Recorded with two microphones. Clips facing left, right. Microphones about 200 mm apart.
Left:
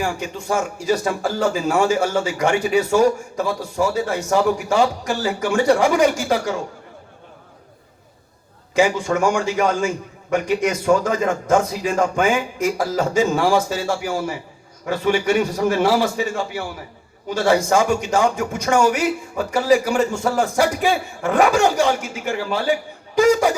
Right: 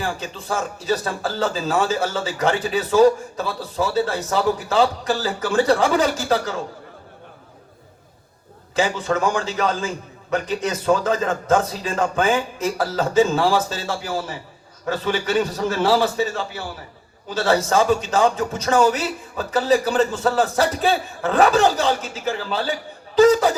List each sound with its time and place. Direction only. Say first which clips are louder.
0.0 s speech: left 3 dB; 15° left (ahead or behind)
8.7 s speech: left 3 dB; 15° left (ahead or behind)